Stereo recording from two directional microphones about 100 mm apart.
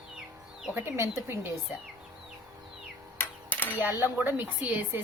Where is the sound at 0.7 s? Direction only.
25° right (ahead or behind).